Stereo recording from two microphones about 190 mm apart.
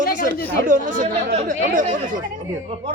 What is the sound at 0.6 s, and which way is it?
Speech, 45° right (ahead or behind).